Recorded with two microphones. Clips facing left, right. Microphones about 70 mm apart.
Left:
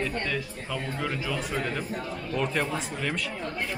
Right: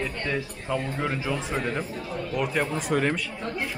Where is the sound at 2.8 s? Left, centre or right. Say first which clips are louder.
Right 8 dB; right.